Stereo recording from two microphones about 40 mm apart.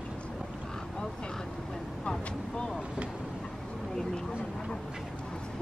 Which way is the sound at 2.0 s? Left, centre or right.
Left.